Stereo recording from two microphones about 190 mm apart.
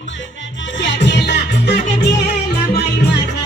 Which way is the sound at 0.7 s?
70° left (ahead or behind).